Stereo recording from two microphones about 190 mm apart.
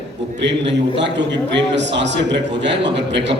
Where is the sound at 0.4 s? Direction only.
65° right (ahead or behind).